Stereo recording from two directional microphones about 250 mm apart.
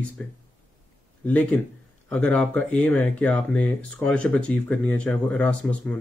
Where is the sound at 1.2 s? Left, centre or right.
Centre.